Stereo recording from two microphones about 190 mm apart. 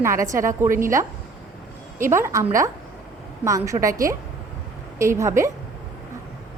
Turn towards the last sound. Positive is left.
turn(degrees=-15)  # may be behind; listen again after turning